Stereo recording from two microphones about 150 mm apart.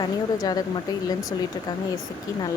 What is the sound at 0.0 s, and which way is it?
Speech, 25° left (ahead or behind).